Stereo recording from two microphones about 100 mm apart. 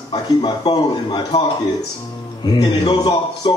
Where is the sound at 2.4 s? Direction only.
40° left (ahead or behind).